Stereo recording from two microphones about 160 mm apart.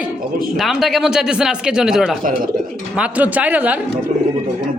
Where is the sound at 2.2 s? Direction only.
55° right (ahead or behind).